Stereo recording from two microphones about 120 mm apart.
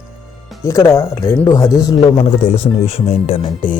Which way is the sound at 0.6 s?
25° left (ahead or behind).